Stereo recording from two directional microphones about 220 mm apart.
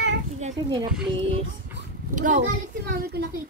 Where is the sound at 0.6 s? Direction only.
15° right (ahead or behind).